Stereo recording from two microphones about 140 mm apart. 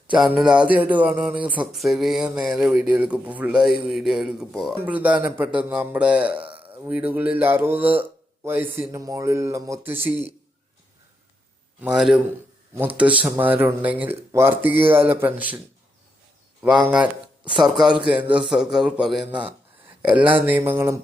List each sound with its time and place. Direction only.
0.1 s a man's voice: 10° right (ahead or behind)
6.4 s a sound: 40° right (ahead or behind)
6.8 s speech: 15° right (ahead or behind)
11.8 s speech: 5° right (ahead or behind)
16.8 s speech: 10° right (ahead or behind)
17.4 s speech: 35° right (ahead or behind)
17.7 s a man's voice: 5° right (ahead or behind)